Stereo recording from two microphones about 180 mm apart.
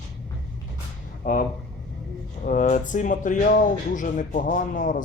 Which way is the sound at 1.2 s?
50° left (ahead or behind).